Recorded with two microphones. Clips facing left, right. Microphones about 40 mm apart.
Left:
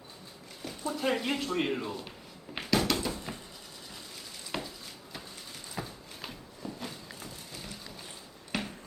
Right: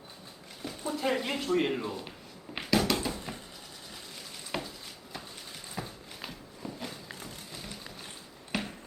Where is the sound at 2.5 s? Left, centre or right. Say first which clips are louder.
Right 1 dB; centre.